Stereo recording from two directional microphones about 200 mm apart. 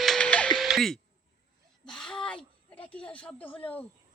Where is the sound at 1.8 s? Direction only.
5° left (ahead or behind).